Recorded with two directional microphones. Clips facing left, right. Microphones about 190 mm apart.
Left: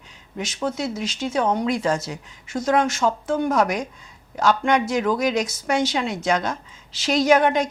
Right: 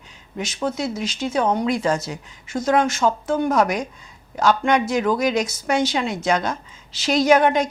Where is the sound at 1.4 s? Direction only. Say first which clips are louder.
Right 1 dB; 20° right (ahead or behind).